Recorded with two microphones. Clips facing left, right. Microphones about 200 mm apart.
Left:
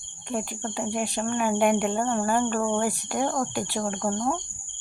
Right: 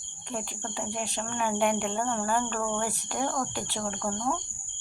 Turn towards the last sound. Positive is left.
turn(degrees=20)  # may be behind; listen again after turning